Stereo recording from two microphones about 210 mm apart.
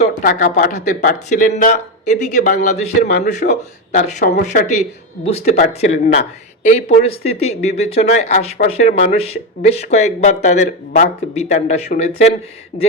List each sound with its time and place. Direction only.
0.2 s speech: 40° left (ahead or behind)
4.2 s speech: 50° left (ahead or behind)
4.8 s speech: 30° left (ahead or behind)